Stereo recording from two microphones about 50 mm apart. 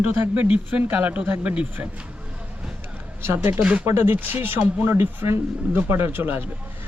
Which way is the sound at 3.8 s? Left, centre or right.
Right.